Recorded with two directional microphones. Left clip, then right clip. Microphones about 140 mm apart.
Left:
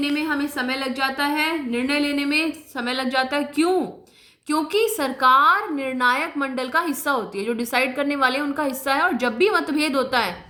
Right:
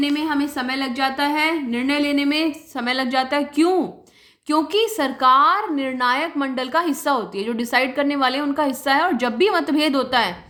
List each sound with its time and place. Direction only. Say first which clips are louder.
0.0 s a woman's voice: right 2 dB; 50° right (ahead or behind); by 10.3 s 35° right (ahead or behind)